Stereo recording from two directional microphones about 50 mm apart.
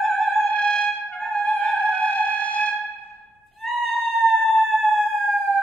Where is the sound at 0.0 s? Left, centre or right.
Left.